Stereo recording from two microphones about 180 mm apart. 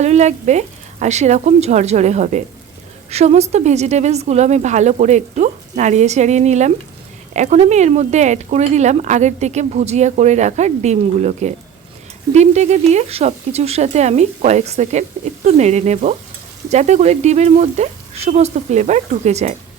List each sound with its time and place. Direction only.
0.0 s speech: 40° right (ahead or behind)